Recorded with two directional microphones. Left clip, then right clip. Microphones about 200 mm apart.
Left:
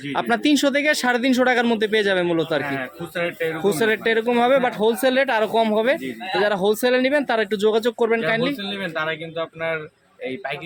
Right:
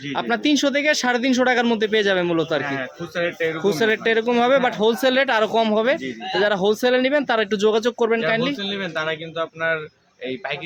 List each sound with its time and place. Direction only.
0.1 s speech: 10° left (ahead or behind)